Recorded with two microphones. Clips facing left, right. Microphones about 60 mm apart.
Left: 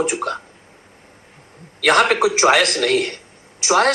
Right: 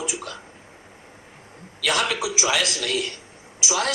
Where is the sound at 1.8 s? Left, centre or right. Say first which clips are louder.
Left 9 dB; left.